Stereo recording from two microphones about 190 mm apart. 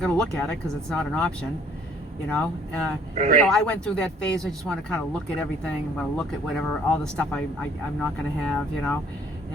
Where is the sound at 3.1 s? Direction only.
45° right (ahead or behind).